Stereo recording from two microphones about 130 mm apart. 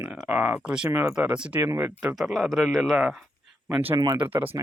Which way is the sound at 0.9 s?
20° right (ahead or behind).